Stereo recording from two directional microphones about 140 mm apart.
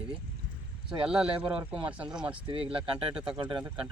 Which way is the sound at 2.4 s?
40° right (ahead or behind).